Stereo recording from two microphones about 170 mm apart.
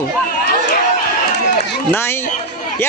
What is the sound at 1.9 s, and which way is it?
Speech, 15° left (ahead or behind).